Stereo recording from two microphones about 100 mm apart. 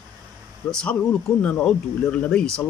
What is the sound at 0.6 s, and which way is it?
Speech, 5° left (ahead or behind).